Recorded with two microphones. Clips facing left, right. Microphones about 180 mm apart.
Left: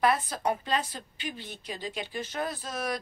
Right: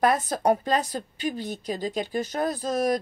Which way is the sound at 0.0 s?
45° right (ahead or behind).